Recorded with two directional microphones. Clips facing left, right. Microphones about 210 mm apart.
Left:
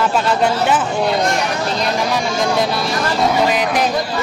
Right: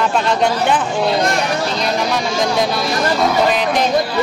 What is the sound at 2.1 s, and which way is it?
Speech, 5° left (ahead or behind).